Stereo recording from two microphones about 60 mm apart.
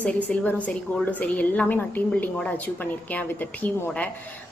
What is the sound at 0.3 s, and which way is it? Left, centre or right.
A woman's voice, left.